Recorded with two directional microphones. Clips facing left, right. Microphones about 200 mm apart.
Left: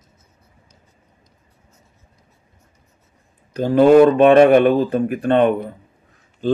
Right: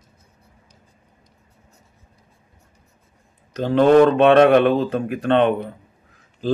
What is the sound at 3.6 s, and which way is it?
Speech, 10° left (ahead or behind).